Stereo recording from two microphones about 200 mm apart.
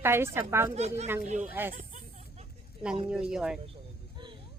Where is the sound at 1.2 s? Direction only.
40° right (ahead or behind).